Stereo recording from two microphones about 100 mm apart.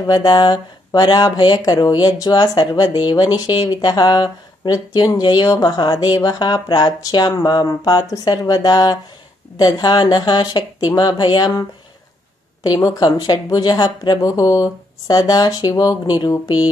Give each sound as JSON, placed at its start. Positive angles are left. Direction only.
{"t": 0.0, "sound": "speech", "side_deg": 45}
{"t": 12.6, "sound": "speech", "side_deg": 35}